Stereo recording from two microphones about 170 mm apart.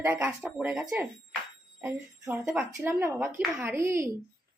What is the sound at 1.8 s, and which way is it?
Jingle bell, 15° right (ahead or behind).